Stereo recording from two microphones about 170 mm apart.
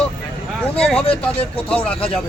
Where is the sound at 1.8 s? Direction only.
35° left (ahead or behind).